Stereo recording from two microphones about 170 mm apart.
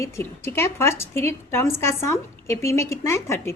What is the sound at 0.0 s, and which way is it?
A woman's voice, 15° left (ahead or behind).